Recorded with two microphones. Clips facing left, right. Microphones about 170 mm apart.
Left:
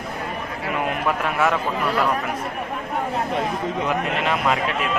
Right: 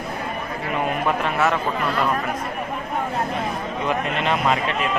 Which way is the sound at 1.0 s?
10° left (ahead or behind).